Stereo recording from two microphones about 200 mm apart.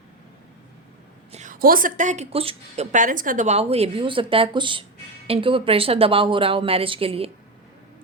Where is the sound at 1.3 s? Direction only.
35° right (ahead or behind).